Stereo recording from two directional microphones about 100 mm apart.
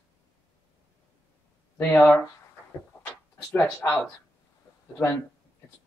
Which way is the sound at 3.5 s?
10° left (ahead or behind).